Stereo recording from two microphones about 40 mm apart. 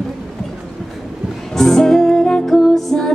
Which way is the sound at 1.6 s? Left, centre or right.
Centre.